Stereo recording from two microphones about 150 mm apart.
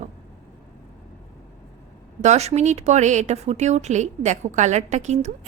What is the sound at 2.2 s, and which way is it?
Speech, 45° right (ahead or behind).